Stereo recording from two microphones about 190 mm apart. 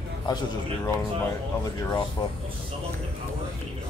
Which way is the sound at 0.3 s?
20° left (ahead or behind).